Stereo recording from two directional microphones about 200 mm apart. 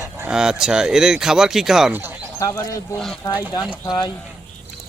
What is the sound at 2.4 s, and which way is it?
Speech, 15° left (ahead or behind).